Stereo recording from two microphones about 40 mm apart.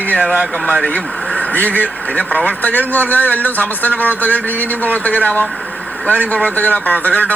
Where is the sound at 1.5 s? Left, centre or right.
Left.